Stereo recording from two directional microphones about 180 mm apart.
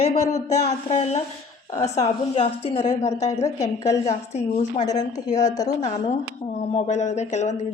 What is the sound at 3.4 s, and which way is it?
Speech, 20° left (ahead or behind).